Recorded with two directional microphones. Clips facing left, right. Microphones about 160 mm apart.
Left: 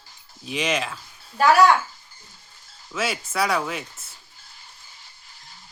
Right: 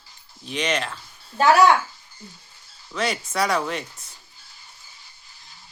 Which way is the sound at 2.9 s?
5° left (ahead or behind).